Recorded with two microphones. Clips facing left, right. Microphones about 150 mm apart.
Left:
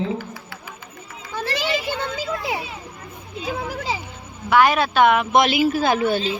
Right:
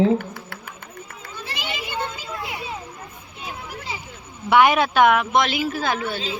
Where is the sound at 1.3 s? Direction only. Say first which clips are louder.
Left 8 dB; 90° left.